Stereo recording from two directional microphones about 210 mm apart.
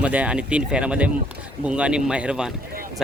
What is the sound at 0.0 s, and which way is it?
Speech, 5° right (ahead or behind).